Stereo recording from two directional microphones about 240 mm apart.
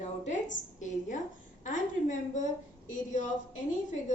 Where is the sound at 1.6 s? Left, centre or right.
Left.